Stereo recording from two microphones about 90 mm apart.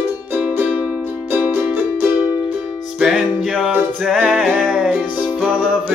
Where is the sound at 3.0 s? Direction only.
5° right (ahead or behind).